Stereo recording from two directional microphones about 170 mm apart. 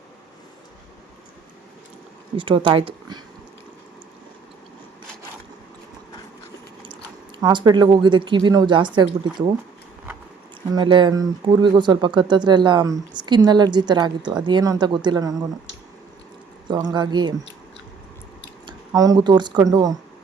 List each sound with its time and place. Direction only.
2.3 s speech: 30° right (ahead or behind)
7.4 s speech: 25° right (ahead or behind)
10.8 s speech: 25° right (ahead or behind)
16.6 s speech: 25° right (ahead or behind)
18.6 s speech: 25° right (ahead or behind)